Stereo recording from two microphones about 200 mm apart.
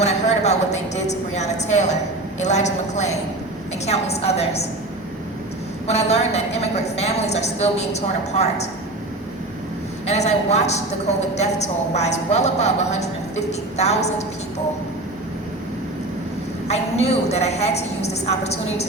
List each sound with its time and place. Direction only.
0.0 s a woman's voice: 35° left (ahead or behind)
5.9 s a woman's voice: 35° left (ahead or behind)
10.1 s a woman's voice: 35° left (ahead or behind)
16.6 s a woman's voice: 35° left (ahead or behind)